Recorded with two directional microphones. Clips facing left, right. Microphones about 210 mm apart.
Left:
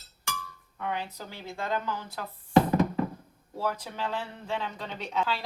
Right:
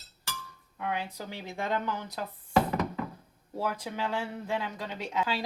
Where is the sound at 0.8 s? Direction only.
10° right (ahead or behind).